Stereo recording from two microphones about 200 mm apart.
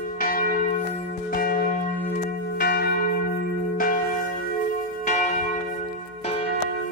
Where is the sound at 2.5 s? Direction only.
55° left (ahead or behind).